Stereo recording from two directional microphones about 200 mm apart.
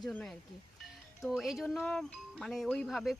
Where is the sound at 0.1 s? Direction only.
5° left (ahead or behind).